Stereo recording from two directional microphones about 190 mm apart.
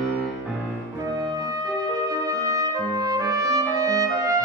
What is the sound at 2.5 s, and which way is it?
Trumpet, 20° right (ahead or behind).